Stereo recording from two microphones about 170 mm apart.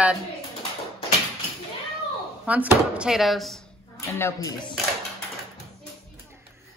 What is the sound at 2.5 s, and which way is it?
Speech, 10° right (ahead or behind).